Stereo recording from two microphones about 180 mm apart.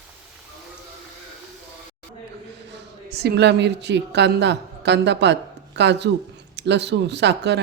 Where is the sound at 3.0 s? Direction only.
65° right (ahead or behind).